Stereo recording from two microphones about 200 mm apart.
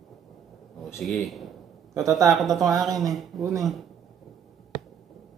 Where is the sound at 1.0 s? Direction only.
Centre (ahead or behind).